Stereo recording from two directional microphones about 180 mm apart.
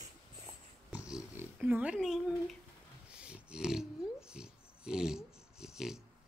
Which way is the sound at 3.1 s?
5° right (ahead or behind).